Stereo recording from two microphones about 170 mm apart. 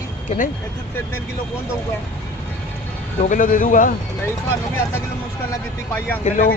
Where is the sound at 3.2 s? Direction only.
50° left (ahead or behind).